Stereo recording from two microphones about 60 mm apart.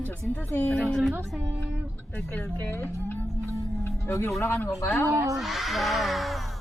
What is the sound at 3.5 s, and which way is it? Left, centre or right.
Music, left.